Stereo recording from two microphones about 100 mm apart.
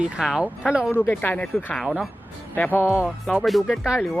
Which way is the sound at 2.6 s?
20° left (ahead or behind).